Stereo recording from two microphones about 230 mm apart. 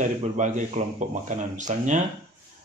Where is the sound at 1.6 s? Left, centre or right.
Right.